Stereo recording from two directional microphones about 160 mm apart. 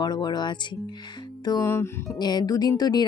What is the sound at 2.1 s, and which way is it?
Speech, 25° left (ahead or behind).